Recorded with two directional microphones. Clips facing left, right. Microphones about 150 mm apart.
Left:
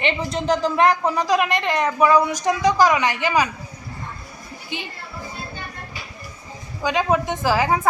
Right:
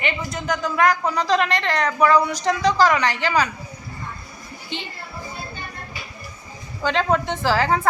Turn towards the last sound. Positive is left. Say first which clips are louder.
# even
turn(degrees=15)  # may be behind; listen again after turning